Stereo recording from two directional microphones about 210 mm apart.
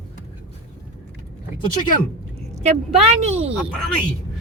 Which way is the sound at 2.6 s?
30° right (ahead or behind).